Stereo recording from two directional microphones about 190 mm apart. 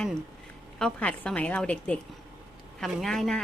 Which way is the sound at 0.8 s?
5° left (ahead or behind).